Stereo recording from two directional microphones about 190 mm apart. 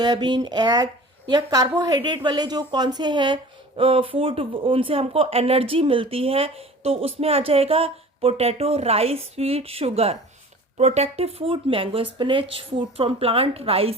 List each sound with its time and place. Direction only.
0.0 s a woman's voice: 20° right (ahead or behind)